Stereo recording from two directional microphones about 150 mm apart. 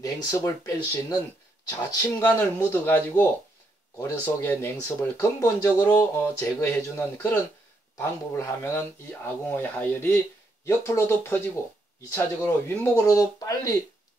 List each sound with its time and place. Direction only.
0.0 s speech: 25° left (ahead or behind)
8.0 s speech: 15° left (ahead or behind)